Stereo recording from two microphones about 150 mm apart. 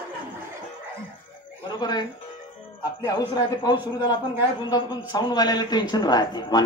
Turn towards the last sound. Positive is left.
turn(degrees=25)  # may be behind; listen again after turning